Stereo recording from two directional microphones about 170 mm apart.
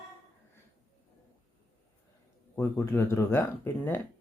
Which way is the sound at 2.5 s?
15° left (ahead or behind).